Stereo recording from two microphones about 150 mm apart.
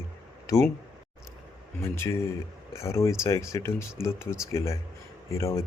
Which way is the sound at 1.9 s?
15° left (ahead or behind).